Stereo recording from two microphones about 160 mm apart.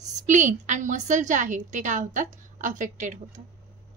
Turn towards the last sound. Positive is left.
turn(degrees=-55)  # may be behind; listen again after turning